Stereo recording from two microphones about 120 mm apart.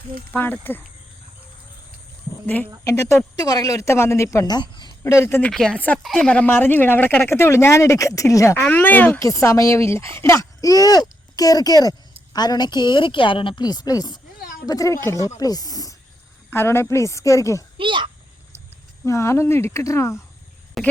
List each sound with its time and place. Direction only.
0.3 s speech: 15° left (ahead or behind)
2.8 s speech: 25° left (ahead or behind)
4.4 s speech: 40° left (ahead or behind)
5.1 s speech: 20° left (ahead or behind)
5.5 s speech: 5° left (ahead or behind); by 8.5 s 25° left (ahead or behind)
8.6 s speech: 15° left (ahead or behind)
9.2 s speech: 25° left (ahead or behind)
16.5 s speech: 20° left (ahead or behind)
17.7 s speech: 45° right (ahead or behind)
19.0 s speech: 25° left (ahead or behind)
20.8 s speech: centre (ahead or behind)